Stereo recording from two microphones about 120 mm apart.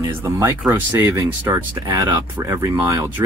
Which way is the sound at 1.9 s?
35° right (ahead or behind).